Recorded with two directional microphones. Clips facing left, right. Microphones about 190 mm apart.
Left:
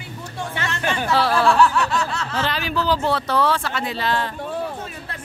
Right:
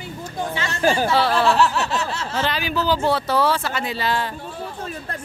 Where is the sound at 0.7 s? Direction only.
35° right (ahead or behind).